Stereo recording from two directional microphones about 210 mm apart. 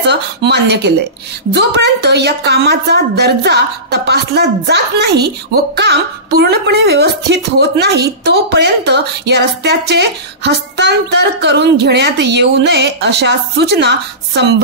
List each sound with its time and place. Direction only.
0.1 s speech: 55° right (ahead or behind)